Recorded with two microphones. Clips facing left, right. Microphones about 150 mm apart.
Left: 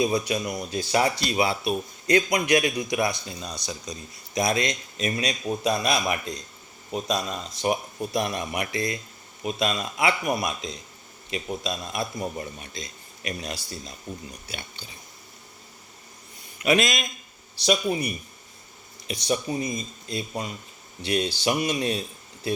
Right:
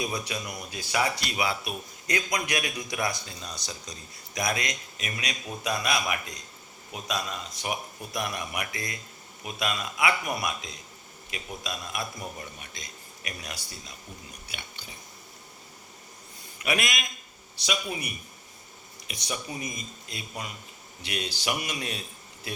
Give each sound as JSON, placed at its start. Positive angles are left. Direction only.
{"t": 0.0, "sound": "speech", "side_deg": 25}
{"t": 0.7, "sound": "speech", "side_deg": 35}
{"t": 14.8, "sound": "chewing", "side_deg": 30}
{"t": 16.6, "sound": "a man's voice", "side_deg": 25}